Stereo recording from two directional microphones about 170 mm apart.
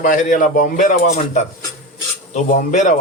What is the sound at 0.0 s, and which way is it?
A man's voice, 50° left (ahead or behind).